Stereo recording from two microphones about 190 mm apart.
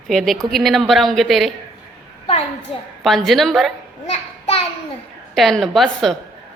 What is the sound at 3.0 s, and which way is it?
Speech, centre (ahead or behind).